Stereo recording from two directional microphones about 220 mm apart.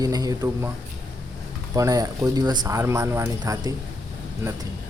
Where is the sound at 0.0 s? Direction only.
15° right (ahead or behind).